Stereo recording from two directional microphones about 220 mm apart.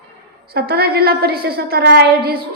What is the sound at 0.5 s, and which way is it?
A woman's voice, 45° right (ahead or behind).